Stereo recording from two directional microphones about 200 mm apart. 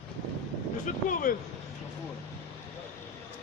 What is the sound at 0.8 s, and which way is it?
Speech, 40° left (ahead or behind).